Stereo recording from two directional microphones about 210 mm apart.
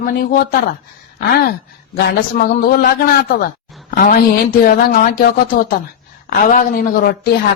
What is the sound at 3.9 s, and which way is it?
Speech, 45° left (ahead or behind).